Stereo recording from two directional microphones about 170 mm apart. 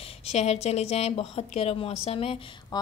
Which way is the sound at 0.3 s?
40° left (ahead or behind).